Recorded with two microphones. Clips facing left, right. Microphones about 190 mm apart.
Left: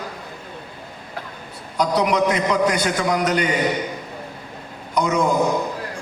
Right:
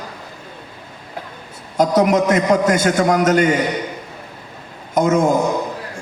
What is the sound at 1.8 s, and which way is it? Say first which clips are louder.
A man's voice: right 4 dB; 45° right (ahead or behind).